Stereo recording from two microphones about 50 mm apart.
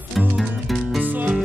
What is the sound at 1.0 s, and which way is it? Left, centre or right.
Music, right.